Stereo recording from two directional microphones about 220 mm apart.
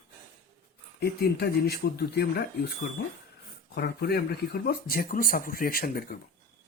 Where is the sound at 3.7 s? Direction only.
45° left (ahead or behind).